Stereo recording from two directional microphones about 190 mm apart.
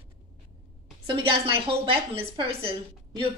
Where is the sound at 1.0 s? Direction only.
25° right (ahead or behind).